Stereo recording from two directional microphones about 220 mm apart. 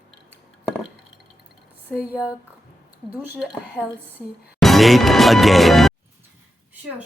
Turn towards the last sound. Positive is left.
turn(degrees=0)  # may be behind; listen again after turning